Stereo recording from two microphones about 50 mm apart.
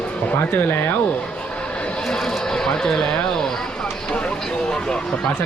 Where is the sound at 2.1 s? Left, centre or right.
Centre.